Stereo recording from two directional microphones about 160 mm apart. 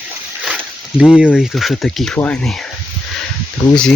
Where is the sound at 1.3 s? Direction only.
Centre (ahead or behind).